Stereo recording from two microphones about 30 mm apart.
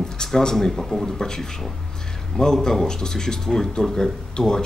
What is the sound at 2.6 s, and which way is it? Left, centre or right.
Speech, centre.